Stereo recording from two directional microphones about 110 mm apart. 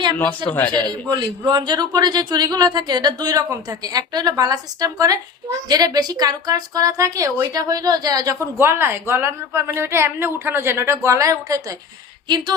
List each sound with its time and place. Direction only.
0.2 s speech: 15° left (ahead or behind)
0.7 s a man's voice: 40° right (ahead or behind)
8.5 s speech: 25° right (ahead or behind)